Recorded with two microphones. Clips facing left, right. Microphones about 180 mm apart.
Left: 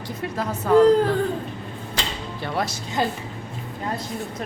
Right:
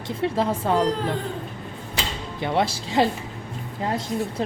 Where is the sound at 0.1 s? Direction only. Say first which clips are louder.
Right 5 dB; 30° right (ahead or behind).